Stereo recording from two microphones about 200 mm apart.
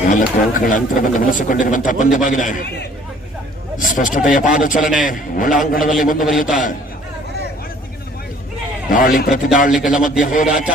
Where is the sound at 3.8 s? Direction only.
40° left (ahead or behind).